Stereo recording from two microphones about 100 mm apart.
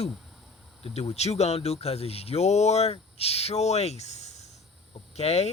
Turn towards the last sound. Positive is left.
turn(degrees=90)